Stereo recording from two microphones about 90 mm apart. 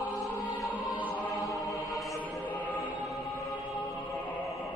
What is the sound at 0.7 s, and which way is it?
Music, 20° left (ahead or behind).